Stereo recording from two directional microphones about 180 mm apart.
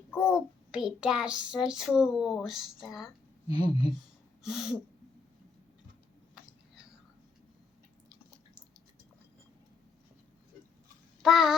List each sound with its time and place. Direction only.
0.3 s child singing: centre (ahead or behind)
3.5 s speech: 25° right (ahead or behind)
4.4 s child singing: centre (ahead or behind)
11.2 s babbling: centre (ahead or behind)